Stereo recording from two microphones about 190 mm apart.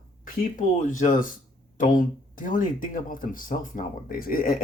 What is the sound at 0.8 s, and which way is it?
Speech, 45° left (ahead or behind).